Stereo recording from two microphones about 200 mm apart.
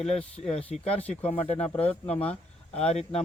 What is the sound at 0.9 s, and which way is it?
Speech, 10° left (ahead or behind).